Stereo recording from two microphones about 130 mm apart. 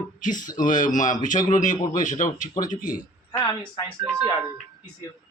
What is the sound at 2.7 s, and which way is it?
Speech, 90° left.